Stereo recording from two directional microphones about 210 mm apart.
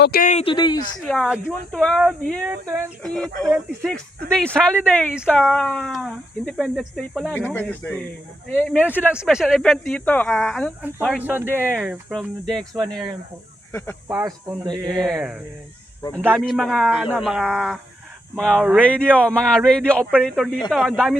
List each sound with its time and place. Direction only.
0.0 s speech: 45° left (ahead or behind); by 0.8 s 20° left (ahead or behind)
1.0 s speech: centre (ahead or behind)
2.4 s speech: 10° right (ahead or behind)
3.0 s speech: centre (ahead or behind)
8.7 s speech: 5° right (ahead or behind)
11.2 s speech: 10° right (ahead or behind)
14.1 s speech: 15° right (ahead or behind)
15.0 s speech: 5° right (ahead or behind)
16.0 s speech: 20° left (ahead or behind)
16.4 s speech: centre (ahead or behind)